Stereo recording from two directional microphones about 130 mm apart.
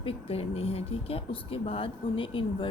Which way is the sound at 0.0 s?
50° left (ahead or behind).